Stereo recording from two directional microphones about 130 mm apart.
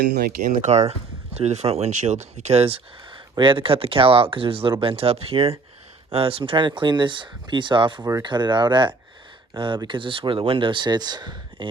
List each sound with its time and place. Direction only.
0.4 s speech: 65° right (ahead or behind); by 11.7 s 35° right (ahead or behind)